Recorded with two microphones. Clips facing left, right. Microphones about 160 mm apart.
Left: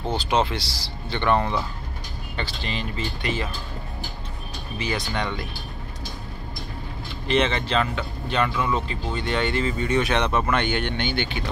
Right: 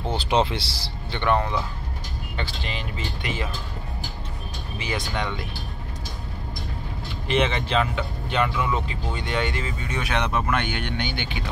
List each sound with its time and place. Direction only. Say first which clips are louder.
0.3 s speech: right 1 dB; 20° right (ahead or behind)
1.1 s speech: left 1 dB; 10° right (ahead or behind)
4.8 s speech: left 1 dB; 10° right (ahead or behind)
7.2 s speech: left 1 dB; 10° right (ahead or behind)